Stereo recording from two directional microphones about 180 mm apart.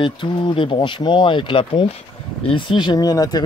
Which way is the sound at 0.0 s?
25° left (ahead or behind).